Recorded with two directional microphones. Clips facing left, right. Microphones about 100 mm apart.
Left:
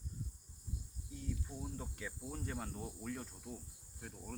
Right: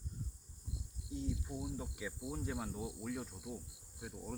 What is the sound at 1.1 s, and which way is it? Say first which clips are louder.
Cricket: right 4 dB; 20° right (ahead or behind).